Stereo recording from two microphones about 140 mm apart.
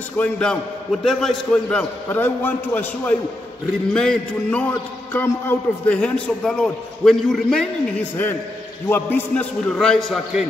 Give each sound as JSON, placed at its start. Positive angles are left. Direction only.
{"t": 0.2, "sound": "a man's voice", "side_deg": 5}
{"t": 8.8, "sound": "a man's voice", "side_deg": 15}